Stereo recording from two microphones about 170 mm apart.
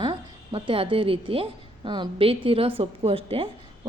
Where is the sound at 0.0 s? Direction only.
30° right (ahead or behind).